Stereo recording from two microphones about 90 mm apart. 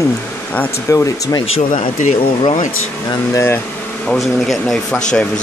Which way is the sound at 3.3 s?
30° left (ahead or behind).